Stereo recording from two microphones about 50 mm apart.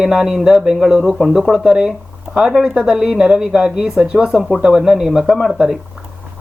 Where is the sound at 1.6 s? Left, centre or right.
Centre.